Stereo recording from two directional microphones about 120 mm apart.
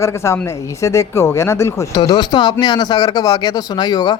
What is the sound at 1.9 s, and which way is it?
Speech, 35° left (ahead or behind).